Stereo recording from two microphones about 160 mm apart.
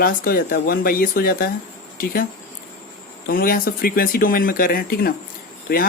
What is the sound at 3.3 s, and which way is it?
Speech, 65° left (ahead or behind).